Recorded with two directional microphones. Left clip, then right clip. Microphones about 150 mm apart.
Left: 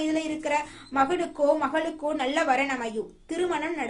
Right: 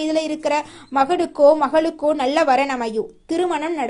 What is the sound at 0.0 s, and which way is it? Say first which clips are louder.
A woman's voice: right 7 dB; 50° right (ahead or behind).